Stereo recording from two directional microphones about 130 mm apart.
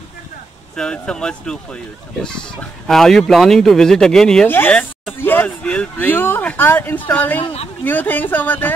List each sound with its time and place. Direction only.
0.7 s speech: 5° left (ahead or behind)
2.9 s speech: 5° left (ahead or behind)
4.5 s speech: 15° left (ahead or behind)